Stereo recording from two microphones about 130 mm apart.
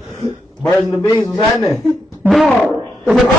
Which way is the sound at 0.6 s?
10° left (ahead or behind).